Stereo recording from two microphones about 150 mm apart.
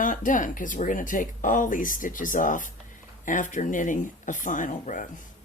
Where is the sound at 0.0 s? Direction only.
60° left (ahead or behind).